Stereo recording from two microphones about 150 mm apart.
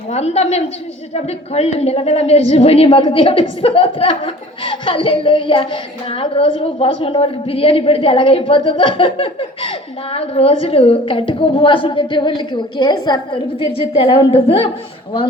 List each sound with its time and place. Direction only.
0.1 s a woman's voice: 45° left (ahead or behind)